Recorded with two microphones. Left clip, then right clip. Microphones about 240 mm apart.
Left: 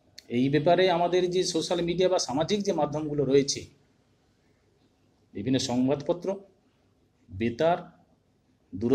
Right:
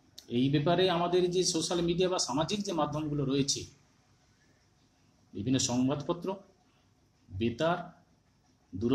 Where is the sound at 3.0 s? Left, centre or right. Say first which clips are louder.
Left 8 dB; centre.